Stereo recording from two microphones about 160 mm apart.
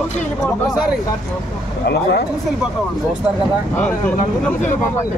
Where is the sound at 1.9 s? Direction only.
90° left.